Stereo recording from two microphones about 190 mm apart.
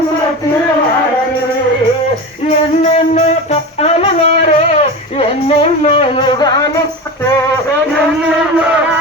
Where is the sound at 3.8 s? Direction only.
35° left (ahead or behind).